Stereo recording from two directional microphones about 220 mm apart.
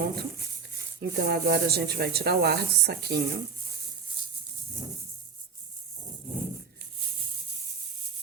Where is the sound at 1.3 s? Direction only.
45° right (ahead or behind).